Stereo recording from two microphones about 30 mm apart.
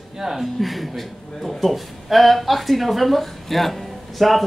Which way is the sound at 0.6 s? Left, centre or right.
Centre.